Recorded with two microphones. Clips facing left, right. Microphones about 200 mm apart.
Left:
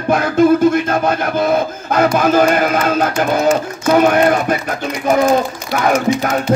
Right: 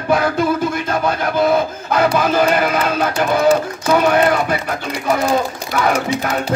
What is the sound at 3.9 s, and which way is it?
Speech, 45° left (ahead or behind).